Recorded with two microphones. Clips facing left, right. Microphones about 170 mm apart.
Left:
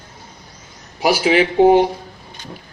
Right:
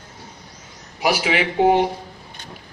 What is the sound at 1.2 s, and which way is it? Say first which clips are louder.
Speech: left 7 dB; 40° left (ahead or behind).